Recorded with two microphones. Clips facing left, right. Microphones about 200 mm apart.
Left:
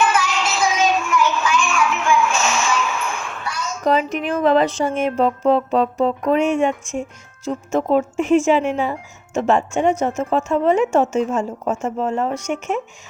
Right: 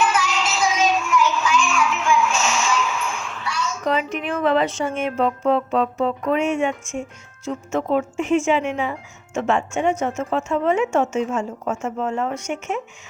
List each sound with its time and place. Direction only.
0.0 s child singing: 60° left (ahead or behind); by 6.7 s 35° left (ahead or behind)
7.4 s speech: 35° left (ahead or behind)